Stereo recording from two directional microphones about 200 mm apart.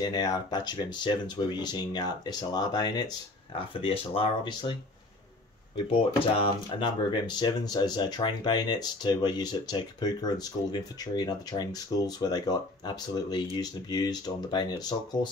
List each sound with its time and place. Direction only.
0.0 s speech: 20° left (ahead or behind)
6.3 s speech: 25° left (ahead or behind)